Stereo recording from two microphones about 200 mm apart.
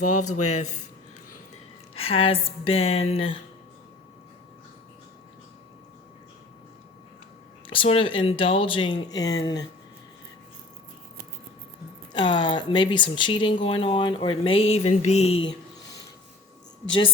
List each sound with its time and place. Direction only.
0.0 s speech: 35° left (ahead or behind)
2.0 s speech: 30° left (ahead or behind)
7.7 s speech: 25° left (ahead or behind)
12.1 s speech: 20° left (ahead or behind)